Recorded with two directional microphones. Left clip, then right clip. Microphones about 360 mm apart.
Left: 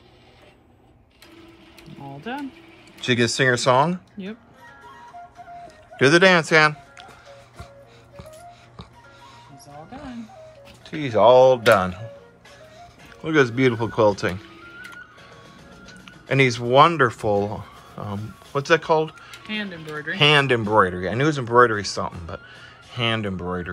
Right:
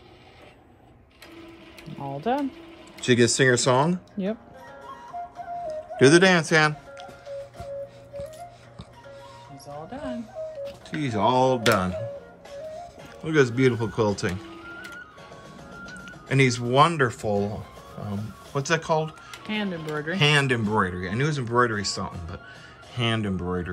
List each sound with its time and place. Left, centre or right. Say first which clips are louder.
1.9 s mechanisms: right 5 dB; centre
2.1 s speech: right 6 dB; right
3.0 s speech: even; centre
5.7 s music: even; centre
9.9 s music: right 6 dB; centre
12.7 s speech: right 5 dB; centre
16.1 s speech: left 3 dB; centre
19.4 s speech: even; centre
20.2 s speech: left 5 dB; centre